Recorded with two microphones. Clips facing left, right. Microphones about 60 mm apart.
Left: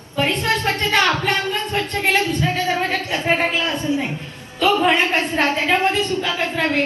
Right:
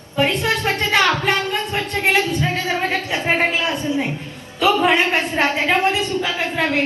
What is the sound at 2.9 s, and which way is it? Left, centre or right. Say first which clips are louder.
Speech: even; centre.